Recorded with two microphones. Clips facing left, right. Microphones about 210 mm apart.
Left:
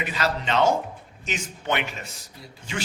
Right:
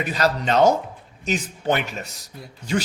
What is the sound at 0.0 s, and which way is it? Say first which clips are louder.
A man's voice: right 5 dB; 40° right (ahead or behind).